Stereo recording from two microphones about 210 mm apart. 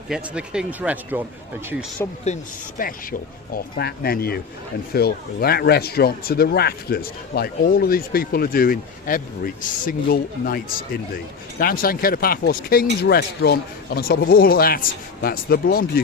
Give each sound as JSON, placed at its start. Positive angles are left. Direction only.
{"t": 0.1, "sound": "speech", "side_deg": -5}
{"t": 2.2, "sound": "speech", "side_deg": 35}